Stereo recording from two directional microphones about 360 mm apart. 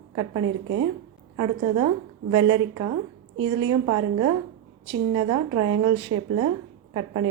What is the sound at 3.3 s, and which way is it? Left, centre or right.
Speech, right.